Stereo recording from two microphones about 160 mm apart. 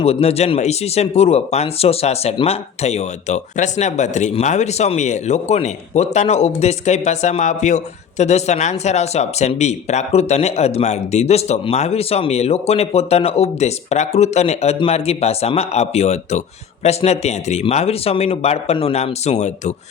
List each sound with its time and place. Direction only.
0.0 s speech: 40° left (ahead or behind)